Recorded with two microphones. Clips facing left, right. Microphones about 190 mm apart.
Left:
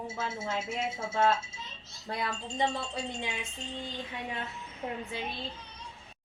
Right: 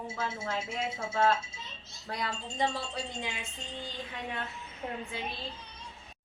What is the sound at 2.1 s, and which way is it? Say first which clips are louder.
Speech: left 2 dB; 20° left (ahead or behind).